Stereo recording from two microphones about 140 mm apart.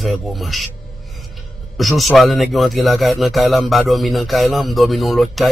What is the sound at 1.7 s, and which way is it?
Speech, centre (ahead or behind).